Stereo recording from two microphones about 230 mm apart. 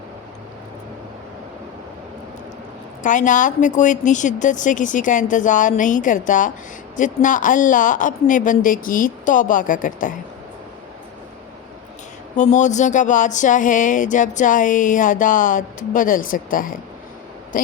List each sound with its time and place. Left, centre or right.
3.0 s speech: left
12.4 s speech: left